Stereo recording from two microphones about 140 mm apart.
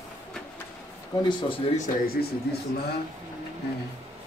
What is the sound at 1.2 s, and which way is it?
Speech, 35° left (ahead or behind).